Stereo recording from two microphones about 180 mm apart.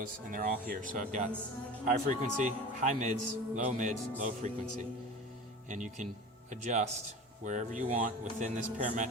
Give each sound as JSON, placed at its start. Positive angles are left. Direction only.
{"t": 0.0, "sound": "a man's voice", "side_deg": -50}
{"t": 5.6, "sound": "a man's voice", "side_deg": -45}